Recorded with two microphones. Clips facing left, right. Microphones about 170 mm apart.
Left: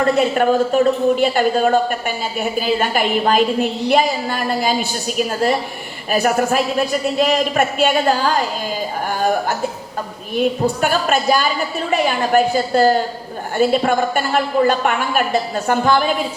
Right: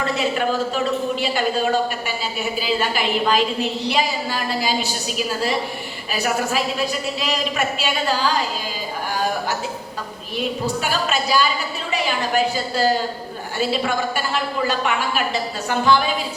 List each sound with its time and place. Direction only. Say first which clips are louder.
0.0 s a woman's voice: left 6 dB; 50° left (ahead or behind)